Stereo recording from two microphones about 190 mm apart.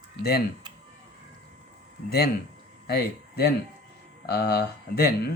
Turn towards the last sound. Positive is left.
turn(degrees=55)  # may be behind; listen again after turning